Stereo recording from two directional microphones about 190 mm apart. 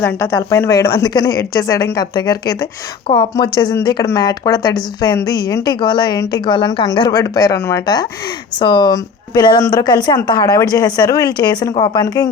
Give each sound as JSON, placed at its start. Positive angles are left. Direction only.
{"t": 0.0, "sound": "a woman's voice", "side_deg": 15}